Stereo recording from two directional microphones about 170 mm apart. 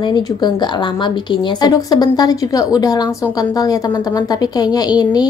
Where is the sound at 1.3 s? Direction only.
25° left (ahead or behind).